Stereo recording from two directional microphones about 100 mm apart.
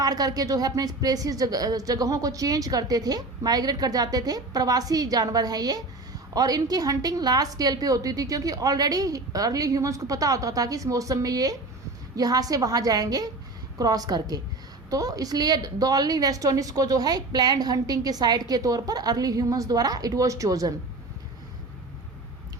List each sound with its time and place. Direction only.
0.0 s a woman's voice: 40° right (ahead or behind)